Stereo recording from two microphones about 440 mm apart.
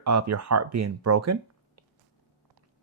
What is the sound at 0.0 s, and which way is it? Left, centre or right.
Speech, right.